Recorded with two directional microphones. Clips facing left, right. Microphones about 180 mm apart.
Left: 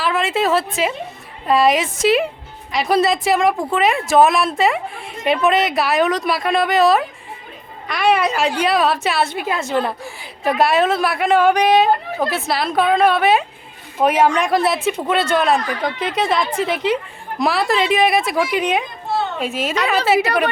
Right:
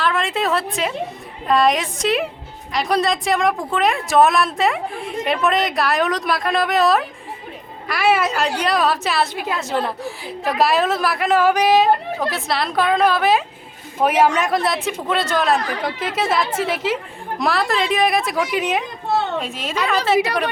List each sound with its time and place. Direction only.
0.0 s a woman's voice: centre (ahead or behind)